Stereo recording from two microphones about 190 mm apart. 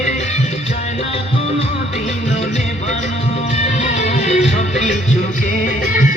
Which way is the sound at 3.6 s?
35° left (ahead or behind).